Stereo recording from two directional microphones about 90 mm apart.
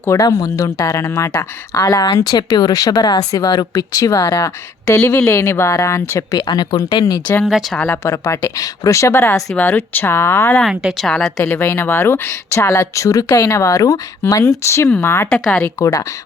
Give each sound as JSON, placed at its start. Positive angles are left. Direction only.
{"t": 0.1, "sound": "speech", "side_deg": 40}
{"t": 6.5, "sound": "speech", "side_deg": 50}
{"t": 7.4, "sound": "speech", "side_deg": -5}
{"t": 8.0, "sound": "speech", "side_deg": 35}
{"t": 10.7, "sound": "speech", "side_deg": 0}
{"t": 11.5, "sound": "speech", "side_deg": 25}
{"t": 15.3, "sound": "speech", "side_deg": 10}
{"t": 15.8, "sound": "speech", "side_deg": 40}